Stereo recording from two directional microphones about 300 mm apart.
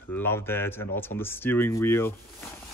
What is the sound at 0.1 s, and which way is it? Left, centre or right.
Speech, centre.